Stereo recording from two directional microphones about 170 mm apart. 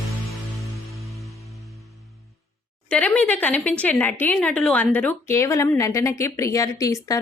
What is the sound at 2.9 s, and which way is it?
A woman's voice, 10° left (ahead or behind).